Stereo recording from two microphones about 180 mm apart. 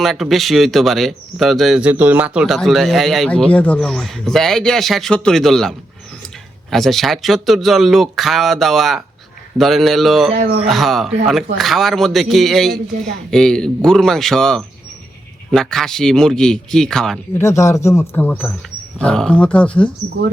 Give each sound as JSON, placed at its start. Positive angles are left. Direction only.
{"t": 0.0, "sound": "speech", "side_deg": 0}
{"t": 17.4, "sound": "speech", "side_deg": 15}